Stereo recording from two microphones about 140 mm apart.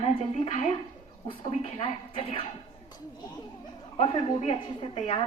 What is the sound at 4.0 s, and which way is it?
A woman's voice, 40° left (ahead or behind).